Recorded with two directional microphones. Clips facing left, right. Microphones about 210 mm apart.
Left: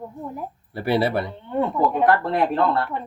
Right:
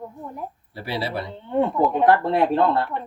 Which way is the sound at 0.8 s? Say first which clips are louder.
Left 7 dB; 55° left (ahead or behind).